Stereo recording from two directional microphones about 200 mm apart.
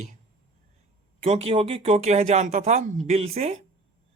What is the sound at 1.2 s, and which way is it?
A man's voice, 30° right (ahead or behind).